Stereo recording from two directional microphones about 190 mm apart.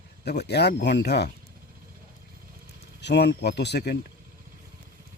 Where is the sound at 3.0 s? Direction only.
65° left (ahead or behind).